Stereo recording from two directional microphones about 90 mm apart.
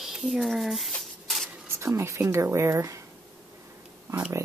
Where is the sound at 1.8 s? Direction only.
30° right (ahead or behind).